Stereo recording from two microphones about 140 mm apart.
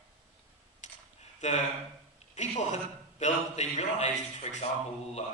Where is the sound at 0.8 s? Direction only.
55° left (ahead or behind).